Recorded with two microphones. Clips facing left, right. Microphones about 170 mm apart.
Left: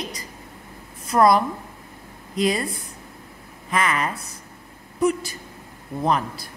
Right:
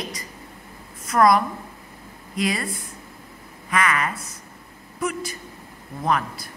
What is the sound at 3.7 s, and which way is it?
Speech, 30° left (ahead or behind).